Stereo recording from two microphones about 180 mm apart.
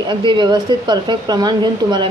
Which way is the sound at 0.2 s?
25° right (ahead or behind).